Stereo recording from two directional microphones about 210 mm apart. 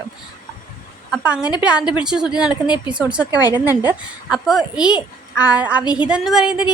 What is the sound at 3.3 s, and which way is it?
Speech, 20° left (ahead or behind).